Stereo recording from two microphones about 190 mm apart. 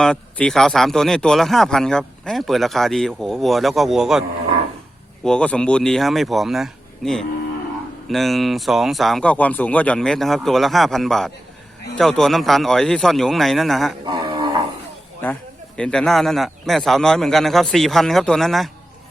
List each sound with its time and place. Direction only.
0.0 s a man's voice: 5° left (ahead or behind)
5.2 s a man's voice: 5° left (ahead or behind)
14.0 s a sound: 20° right (ahead or behind)
15.2 s a man's voice: 5° left (ahead or behind)